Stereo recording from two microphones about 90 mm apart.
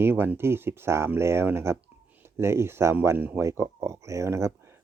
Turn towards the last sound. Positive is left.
turn(degrees=-30)  # may be behind; listen again after turning